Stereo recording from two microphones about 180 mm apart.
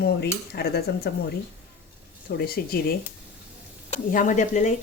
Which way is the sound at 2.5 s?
55° left (ahead or behind).